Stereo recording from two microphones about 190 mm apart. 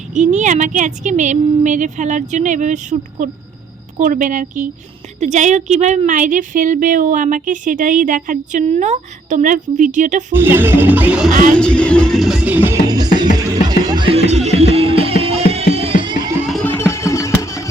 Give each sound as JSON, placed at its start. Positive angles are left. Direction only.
{"t": 0.1, "sound": "speech", "side_deg": -40}
{"t": 10.3, "sound": "music", "side_deg": -10}
{"t": 11.5, "sound": "speech", "side_deg": 5}
{"t": 13.3, "sound": "music", "side_deg": -20}
{"t": 16.5, "sound": "music", "side_deg": 5}